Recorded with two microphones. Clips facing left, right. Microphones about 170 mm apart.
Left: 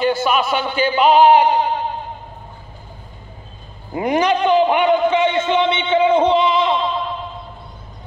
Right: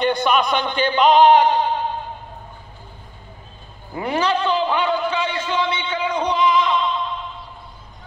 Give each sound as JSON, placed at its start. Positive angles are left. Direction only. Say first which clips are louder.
{"t": 0.0, "sound": "speech", "louder": "left 1 dB", "side_deg": 5}
{"t": 3.9, "sound": "a man's voice", "louder": "left 4 dB", "side_deg": 15}